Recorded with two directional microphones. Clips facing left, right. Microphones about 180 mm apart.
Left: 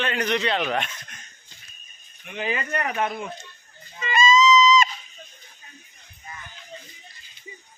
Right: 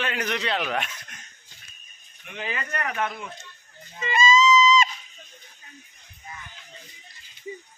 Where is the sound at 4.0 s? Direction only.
25° right (ahead or behind).